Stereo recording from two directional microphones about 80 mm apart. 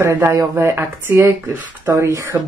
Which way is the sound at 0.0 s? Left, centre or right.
Right.